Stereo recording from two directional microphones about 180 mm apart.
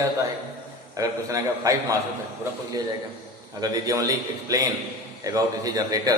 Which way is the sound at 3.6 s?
20° right (ahead or behind).